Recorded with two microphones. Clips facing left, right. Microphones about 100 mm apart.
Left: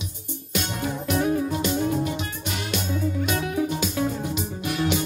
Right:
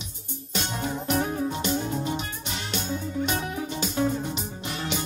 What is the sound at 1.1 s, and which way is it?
Music, 30° right (ahead or behind).